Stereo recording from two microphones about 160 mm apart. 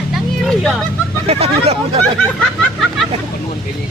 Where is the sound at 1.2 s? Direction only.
40° right (ahead or behind).